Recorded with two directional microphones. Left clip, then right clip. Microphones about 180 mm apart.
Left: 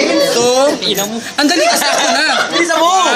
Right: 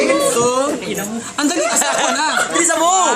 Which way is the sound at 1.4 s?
10° right (ahead or behind).